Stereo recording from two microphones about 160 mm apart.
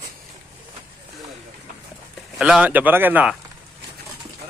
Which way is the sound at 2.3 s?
5° right (ahead or behind).